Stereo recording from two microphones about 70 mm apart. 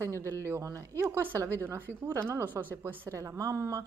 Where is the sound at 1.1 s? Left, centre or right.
Right.